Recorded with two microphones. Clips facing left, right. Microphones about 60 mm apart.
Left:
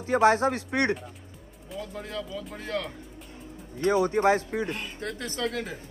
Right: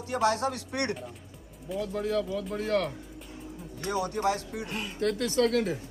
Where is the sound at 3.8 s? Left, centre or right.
Left.